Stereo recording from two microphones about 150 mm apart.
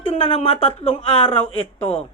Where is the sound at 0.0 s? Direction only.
35° left (ahead or behind).